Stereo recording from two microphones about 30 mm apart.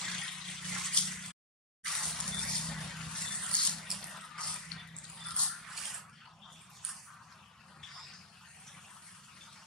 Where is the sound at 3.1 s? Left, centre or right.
Left.